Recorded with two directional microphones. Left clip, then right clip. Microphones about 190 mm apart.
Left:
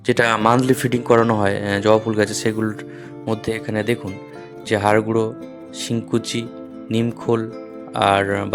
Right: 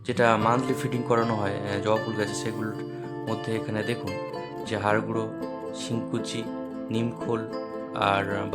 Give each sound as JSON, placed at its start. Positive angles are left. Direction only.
{"t": 0.0, "sound": "speech", "side_deg": 40}